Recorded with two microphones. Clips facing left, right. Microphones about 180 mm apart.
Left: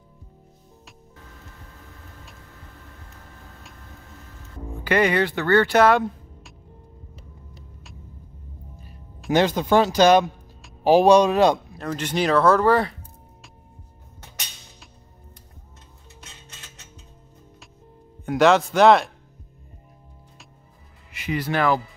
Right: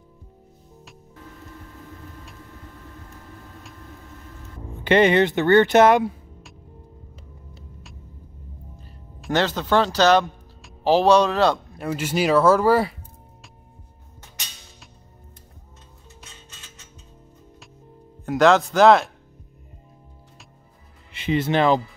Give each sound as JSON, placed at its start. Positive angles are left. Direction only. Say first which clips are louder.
{"t": 4.8, "sound": "speech", "louder": "right 4 dB", "side_deg": -25}
{"t": 9.3, "sound": "speech", "louder": "left 2 dB", "side_deg": 10}
{"t": 11.8, "sound": "speech", "louder": "right 3 dB", "side_deg": -5}
{"t": 16.2, "sound": "music", "louder": "left 1 dB", "side_deg": 0}
{"t": 18.2, "sound": "speech", "louder": "right 1 dB", "side_deg": 0}
{"t": 21.1, "sound": "speech", "louder": "right 4 dB", "side_deg": -25}